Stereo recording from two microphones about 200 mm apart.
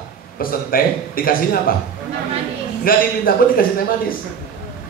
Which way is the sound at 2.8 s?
45° left (ahead or behind).